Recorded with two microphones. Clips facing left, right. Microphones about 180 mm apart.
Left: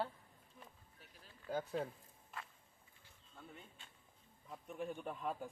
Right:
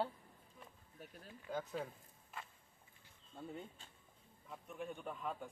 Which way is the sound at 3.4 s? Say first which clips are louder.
Right 8 dB; 35° right (ahead or behind).